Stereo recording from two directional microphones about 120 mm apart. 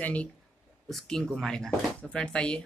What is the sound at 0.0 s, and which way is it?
Speech, 10° left (ahead or behind).